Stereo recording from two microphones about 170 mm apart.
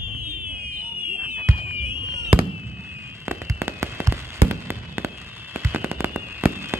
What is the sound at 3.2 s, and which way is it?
Fireworks, 15° right (ahead or behind).